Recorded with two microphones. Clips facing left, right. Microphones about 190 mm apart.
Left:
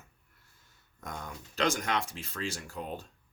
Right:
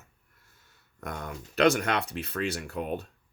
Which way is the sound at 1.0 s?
65° right (ahead or behind).